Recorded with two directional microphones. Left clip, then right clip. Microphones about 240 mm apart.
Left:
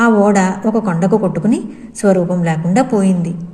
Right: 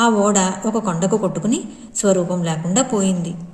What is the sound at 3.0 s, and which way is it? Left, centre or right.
Speech, centre.